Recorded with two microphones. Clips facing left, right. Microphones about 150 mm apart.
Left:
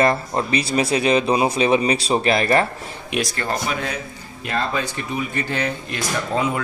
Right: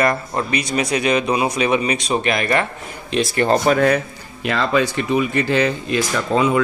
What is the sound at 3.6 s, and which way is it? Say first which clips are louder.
Speech: right 11 dB; 55° right (ahead or behind).